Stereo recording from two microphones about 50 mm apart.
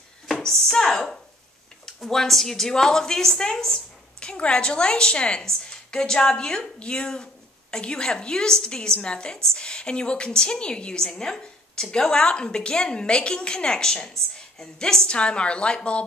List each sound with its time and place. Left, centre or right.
0.4 s a sound: centre
1.9 s a woman's voice: centre
4.2 s a woman's voice: centre